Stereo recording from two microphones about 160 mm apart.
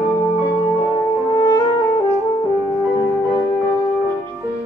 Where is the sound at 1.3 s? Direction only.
25° left (ahead or behind).